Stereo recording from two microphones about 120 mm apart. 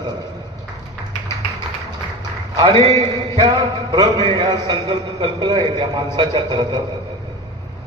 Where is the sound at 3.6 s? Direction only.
35° right (ahead or behind).